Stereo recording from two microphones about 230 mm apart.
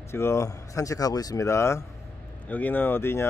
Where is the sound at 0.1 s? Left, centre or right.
Centre.